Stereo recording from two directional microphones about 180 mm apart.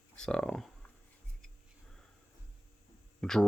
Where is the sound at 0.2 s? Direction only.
5° left (ahead or behind).